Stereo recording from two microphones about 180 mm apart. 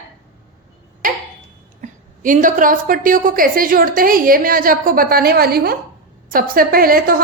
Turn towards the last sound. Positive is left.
turn(degrees=-55)  # may be behind; listen again after turning